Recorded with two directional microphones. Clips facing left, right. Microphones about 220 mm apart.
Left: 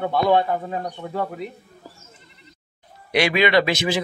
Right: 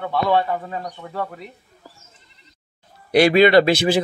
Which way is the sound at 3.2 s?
35° right (ahead or behind).